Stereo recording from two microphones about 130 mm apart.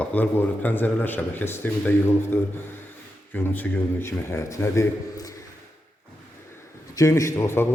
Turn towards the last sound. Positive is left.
turn(degrees=20)  # may be behind; listen again after turning